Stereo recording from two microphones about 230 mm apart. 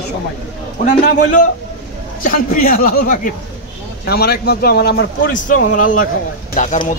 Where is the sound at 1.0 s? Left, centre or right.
Left.